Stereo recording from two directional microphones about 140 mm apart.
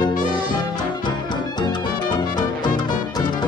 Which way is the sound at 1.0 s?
30° left (ahead or behind).